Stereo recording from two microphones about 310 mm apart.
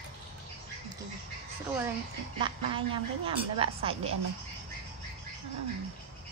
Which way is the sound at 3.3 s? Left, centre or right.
Centre.